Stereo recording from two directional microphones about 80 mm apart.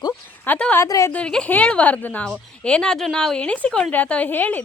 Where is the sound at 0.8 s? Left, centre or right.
Left.